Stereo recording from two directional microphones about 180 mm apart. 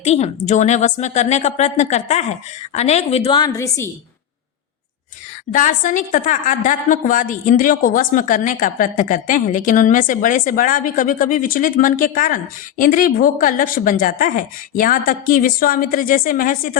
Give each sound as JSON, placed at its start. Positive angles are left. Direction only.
{"t": 0.0, "sound": "a woman's voice", "side_deg": 35}
{"t": 5.5, "sound": "a woman's voice", "side_deg": 45}